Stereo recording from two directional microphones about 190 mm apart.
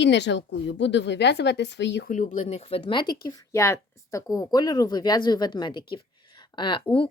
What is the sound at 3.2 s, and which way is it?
Speech, 15° left (ahead or behind).